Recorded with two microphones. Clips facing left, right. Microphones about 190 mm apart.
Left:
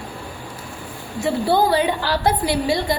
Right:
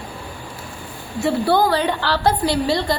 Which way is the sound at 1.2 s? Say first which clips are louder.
Right 1 dB; 15° left (ahead or behind).